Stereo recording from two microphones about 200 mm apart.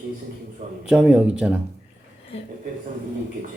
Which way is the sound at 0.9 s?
5° right (ahead or behind).